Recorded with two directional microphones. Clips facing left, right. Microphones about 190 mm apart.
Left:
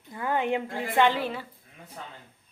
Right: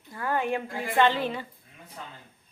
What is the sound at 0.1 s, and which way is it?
A woman's voice, 20° left (ahead or behind).